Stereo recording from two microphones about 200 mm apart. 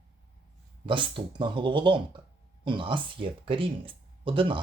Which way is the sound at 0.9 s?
25° right (ahead or behind).